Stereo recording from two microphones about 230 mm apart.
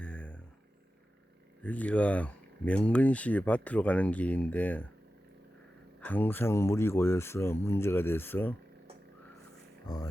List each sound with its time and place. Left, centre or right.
0.0 s vehicle: centre
1.6 s speech: centre
6.0 s speech: centre
9.9 s speech: centre